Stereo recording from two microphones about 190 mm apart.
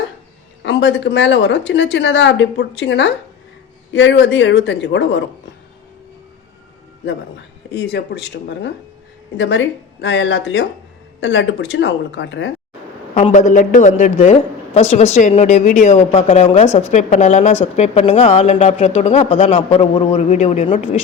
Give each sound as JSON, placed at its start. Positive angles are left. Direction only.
{"t": 0.6, "sound": "a woman's voice", "side_deg": 70}
{"t": 7.7, "sound": "speech", "side_deg": 65}
{"t": 9.4, "sound": "a woman's voice", "side_deg": 80}
{"t": 13.1, "sound": "a woman's voice", "side_deg": 40}